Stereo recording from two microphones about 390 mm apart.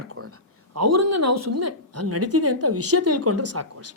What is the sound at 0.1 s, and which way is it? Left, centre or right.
Speech, right.